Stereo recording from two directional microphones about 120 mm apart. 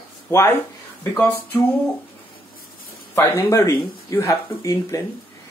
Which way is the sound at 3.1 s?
20° left (ahead or behind).